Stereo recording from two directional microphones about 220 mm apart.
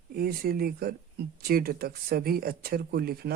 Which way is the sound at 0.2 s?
45° right (ahead or behind).